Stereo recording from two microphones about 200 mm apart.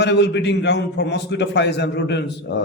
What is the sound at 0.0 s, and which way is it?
A man's voice, 60° left (ahead or behind).